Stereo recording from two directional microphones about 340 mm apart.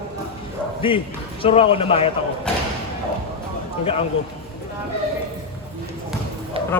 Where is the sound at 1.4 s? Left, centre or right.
Centre.